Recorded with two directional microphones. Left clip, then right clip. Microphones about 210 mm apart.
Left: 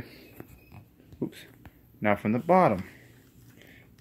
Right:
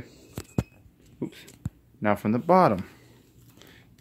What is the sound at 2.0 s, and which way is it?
Speech, 25° right (ahead or behind).